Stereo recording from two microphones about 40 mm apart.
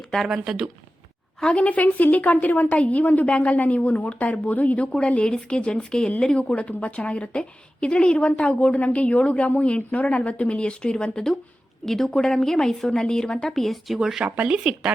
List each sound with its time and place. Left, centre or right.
0.3 s speech: centre
1.5 s a woman's voice: left
4.9 s a woman's voice: left
11.9 s a woman's voice: centre
13.5 s speech: centre
14.3 s speech: right